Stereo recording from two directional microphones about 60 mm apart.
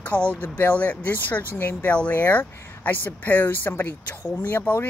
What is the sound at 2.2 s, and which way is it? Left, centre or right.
Speech, left.